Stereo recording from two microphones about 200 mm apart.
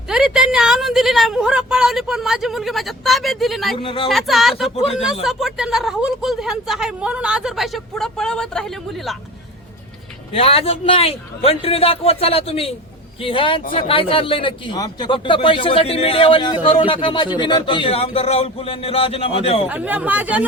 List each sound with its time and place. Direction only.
0.1 s speech: 5° right (ahead or behind)
3.8 s speech: 30° left (ahead or behind)
4.1 s speech: centre (ahead or behind)
4.7 s speech: 30° left (ahead or behind)
5.2 s speech: centre (ahead or behind)
10.3 s speech: 30° left (ahead or behind)
19.6 s speech: 5° right (ahead or behind)